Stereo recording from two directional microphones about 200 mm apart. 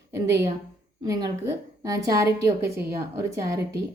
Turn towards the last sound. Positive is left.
turn(degrees=-15)  # may be behind; listen again after turning